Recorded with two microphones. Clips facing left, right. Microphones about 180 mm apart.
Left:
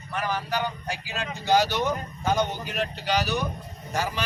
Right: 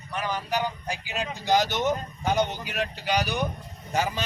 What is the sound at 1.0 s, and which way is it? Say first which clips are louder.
Speech: right 1 dB; 15° right (ahead or behind).